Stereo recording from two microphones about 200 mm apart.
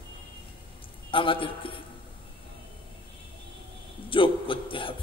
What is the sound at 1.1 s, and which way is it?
Speech, 25° left (ahead or behind).